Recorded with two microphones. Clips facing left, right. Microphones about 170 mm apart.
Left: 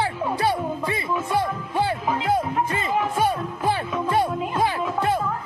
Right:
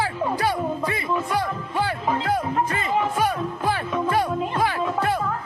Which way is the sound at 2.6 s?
20° left (ahead or behind).